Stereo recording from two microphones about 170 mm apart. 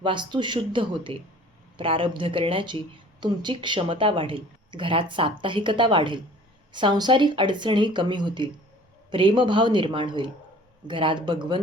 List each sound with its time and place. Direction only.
0.0 s a woman's voice: 30° right (ahead or behind)